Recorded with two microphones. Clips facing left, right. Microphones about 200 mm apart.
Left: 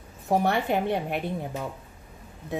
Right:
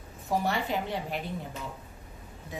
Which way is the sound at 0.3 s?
60° left (ahead or behind).